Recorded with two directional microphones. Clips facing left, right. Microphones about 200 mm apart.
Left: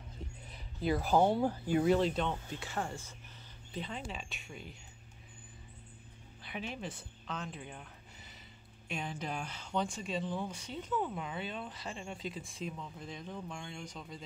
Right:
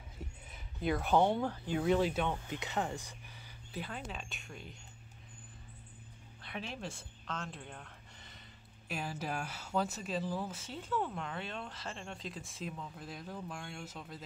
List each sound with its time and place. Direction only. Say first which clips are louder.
0.5 s speech: left 1 dB; centre (ahead or behind)
2.5 s speech: right 2 dB; 20° right (ahead or behind)
3.7 s speech: left 1 dB; 5° right (ahead or behind)
6.4 s speech: left 1 dB; centre (ahead or behind)
7.2 s a sound: left 1 dB; 5° left (ahead or behind)
8.8 s speech: even; 5° right (ahead or behind)